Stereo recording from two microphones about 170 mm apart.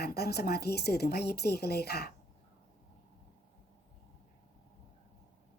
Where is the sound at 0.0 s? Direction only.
70° left (ahead or behind).